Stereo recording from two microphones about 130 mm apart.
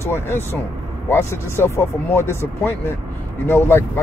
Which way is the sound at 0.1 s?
15° left (ahead or behind).